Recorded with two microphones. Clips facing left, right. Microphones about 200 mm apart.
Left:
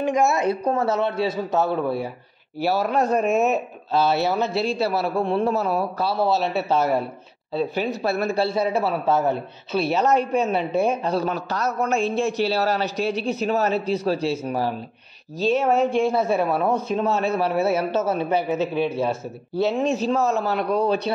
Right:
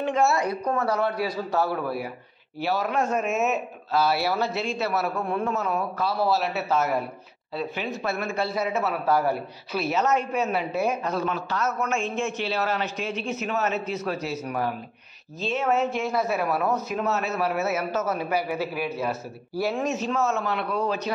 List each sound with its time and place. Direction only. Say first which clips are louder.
0.0 s speech: left 3 dB; 15° left (ahead or behind)
2.6 s a man's voice: left 4 dB; 40° left (ahead or behind); by 4.5 s 20° left (ahead or behind)
4.6 s a man's voice: left 4 dB; 35° left (ahead or behind)